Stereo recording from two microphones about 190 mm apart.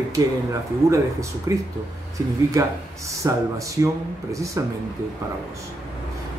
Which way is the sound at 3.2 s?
15° right (ahead or behind).